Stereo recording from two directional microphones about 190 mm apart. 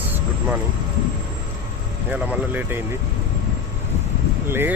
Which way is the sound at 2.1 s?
10° right (ahead or behind).